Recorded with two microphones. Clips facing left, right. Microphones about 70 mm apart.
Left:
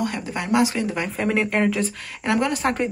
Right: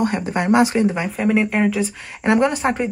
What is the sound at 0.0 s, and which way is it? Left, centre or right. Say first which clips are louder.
Speech: right 6 dB; right.